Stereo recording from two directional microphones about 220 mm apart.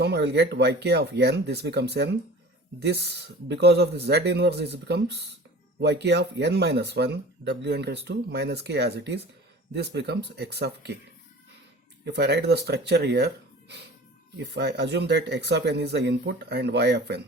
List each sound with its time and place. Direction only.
0.0 s speech: 50° right (ahead or behind)
12.0 s speech: 50° right (ahead or behind)